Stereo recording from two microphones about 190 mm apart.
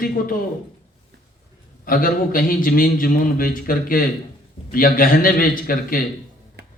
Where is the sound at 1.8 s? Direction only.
50° left (ahead or behind).